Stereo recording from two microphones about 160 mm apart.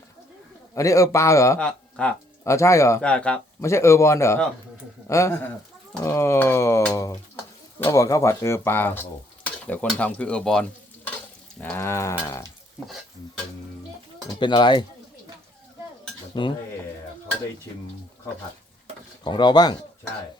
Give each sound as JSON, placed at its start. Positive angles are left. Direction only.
{"t": 0.7, "sound": "a man's voice", "side_deg": 20}
{"t": 1.5, "sound": "speech", "side_deg": 5}
{"t": 2.4, "sound": "speech", "side_deg": 20}
{"t": 3.0, "sound": "a man's voice", "side_deg": 5}
{"t": 14.3, "sound": "a man's voice", "side_deg": 30}
{"t": 16.4, "sound": "a man's voice", "side_deg": 30}
{"t": 19.2, "sound": "a man's voice", "side_deg": 30}